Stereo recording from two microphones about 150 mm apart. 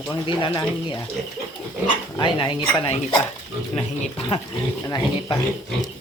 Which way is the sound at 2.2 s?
30° left (ahead or behind).